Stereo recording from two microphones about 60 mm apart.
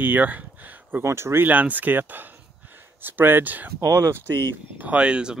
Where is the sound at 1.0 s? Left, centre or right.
Right.